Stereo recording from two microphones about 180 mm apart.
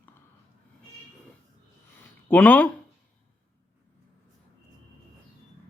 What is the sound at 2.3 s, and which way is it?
Speech, 10° left (ahead or behind).